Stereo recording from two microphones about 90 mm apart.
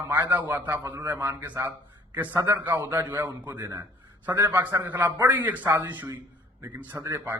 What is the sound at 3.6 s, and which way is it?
Speech, 40° right (ahead or behind).